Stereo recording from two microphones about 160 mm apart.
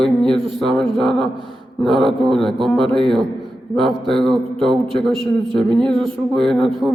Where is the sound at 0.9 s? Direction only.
Centre (ahead or behind).